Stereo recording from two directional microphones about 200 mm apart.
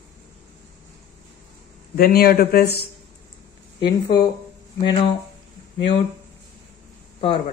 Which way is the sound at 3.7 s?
20° left (ahead or behind).